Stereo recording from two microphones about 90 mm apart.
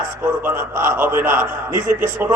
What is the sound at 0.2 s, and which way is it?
A man's voice, 25° right (ahead or behind).